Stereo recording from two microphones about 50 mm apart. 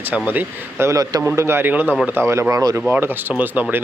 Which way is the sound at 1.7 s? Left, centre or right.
Right.